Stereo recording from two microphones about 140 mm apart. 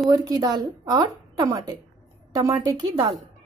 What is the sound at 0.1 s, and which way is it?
A woman's voice, 25° right (ahead or behind).